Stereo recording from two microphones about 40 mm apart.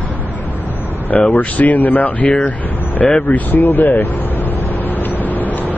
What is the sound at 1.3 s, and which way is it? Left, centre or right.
Speech, left.